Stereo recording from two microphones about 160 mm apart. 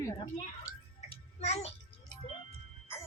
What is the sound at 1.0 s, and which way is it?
Music, 40° left (ahead or behind).